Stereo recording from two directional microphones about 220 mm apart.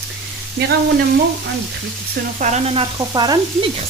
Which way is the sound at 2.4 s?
30° right (ahead or behind).